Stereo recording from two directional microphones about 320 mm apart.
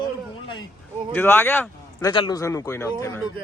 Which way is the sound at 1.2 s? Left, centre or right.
Centre.